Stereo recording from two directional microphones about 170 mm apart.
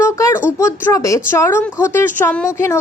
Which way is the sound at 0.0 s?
15° left (ahead or behind).